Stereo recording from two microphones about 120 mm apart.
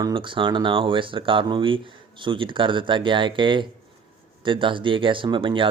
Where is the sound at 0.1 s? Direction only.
45° right (ahead or behind).